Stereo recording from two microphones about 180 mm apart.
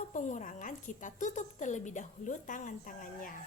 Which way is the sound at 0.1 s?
45° left (ahead or behind).